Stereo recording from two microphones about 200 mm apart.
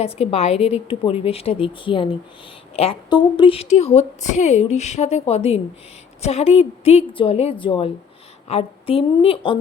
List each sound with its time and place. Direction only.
0.0 s a woman's voice: 30° left (ahead or behind)